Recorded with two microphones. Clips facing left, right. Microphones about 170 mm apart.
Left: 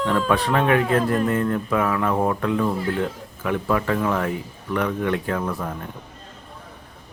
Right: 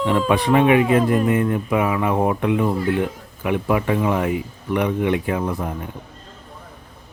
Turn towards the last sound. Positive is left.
turn(degrees=-15)  # may be behind; listen again after turning